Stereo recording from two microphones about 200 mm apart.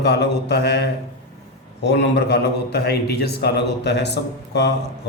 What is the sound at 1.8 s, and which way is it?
A man's voice, 55° left (ahead or behind).